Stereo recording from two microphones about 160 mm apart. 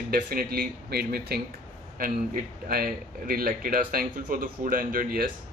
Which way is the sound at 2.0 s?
60° right (ahead or behind).